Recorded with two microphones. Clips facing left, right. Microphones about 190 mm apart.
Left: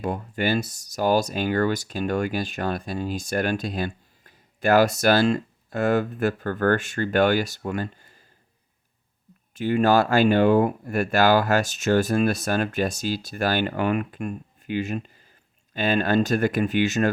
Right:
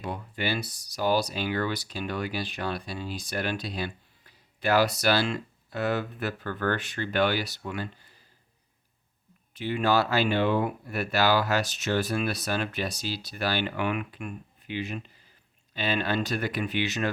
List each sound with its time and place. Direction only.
0.0 s speech: 45° left (ahead or behind)
9.6 s speech: 45° left (ahead or behind)